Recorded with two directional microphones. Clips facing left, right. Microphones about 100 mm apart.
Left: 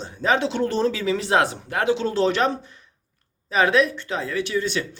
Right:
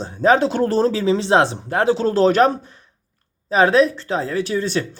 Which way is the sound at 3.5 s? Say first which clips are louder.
Right 4 dB; 35° right (ahead or behind).